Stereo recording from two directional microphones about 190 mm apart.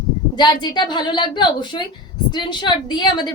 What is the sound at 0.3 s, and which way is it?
A woman's voice, 20° left (ahead or behind).